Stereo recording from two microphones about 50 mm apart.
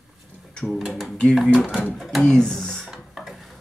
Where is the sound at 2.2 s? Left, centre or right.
Centre.